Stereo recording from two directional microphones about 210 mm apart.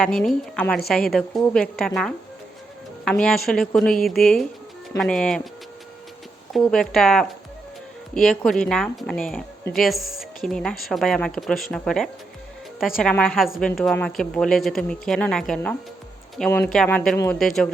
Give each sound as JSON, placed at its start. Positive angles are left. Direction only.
{"t": 0.0, "sound": "a woman's voice", "side_deg": 0}
{"t": 3.0, "sound": "a woman's voice", "side_deg": 5}
{"t": 6.5, "sound": "a woman's voice", "side_deg": 0}